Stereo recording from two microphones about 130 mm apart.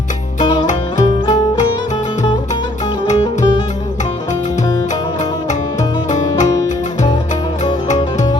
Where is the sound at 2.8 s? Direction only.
30° left (ahead or behind).